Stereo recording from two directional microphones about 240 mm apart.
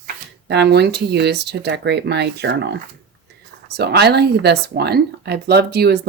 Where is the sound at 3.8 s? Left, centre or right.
Right.